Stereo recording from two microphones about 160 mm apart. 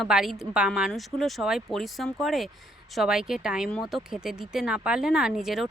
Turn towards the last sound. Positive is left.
turn(degrees=0)  # may be behind; listen again after turning